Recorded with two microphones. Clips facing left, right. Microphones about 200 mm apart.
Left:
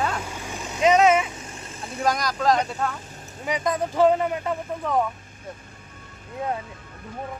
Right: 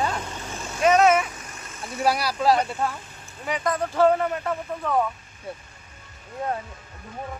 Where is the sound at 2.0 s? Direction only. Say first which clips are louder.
Right 1 dB; 10° right (ahead or behind).